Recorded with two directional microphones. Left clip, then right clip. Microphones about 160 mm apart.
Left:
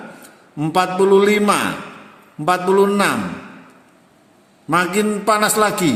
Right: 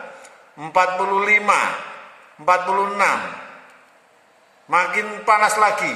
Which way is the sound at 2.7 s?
90° left.